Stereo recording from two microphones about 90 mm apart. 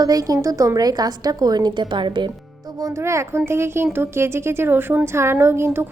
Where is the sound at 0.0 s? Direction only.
45° right (ahead or behind); by 2.3 s 60° right (ahead or behind).